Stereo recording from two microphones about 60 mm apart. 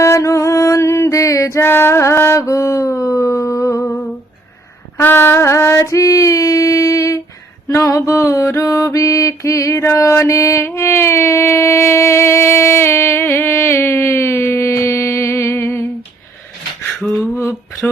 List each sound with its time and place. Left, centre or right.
0.0 s music: left
1.6 s music: left
2.5 s music: left
4.9 s female singing: left
7.8 s mantra: left
9.9 s mantra: left
10.8 s a sound: left
17.0 s a sound: centre